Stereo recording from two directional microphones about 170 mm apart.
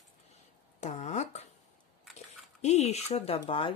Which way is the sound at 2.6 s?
40° left (ahead or behind).